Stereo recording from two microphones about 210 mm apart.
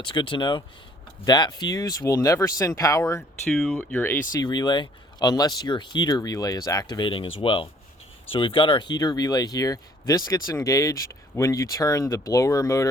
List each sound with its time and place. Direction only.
0.0 s speech: 25° left (ahead or behind)
3.5 s speech: 5° left (ahead or behind)